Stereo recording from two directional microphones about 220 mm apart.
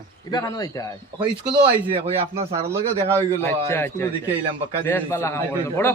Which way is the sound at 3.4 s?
10° left (ahead or behind).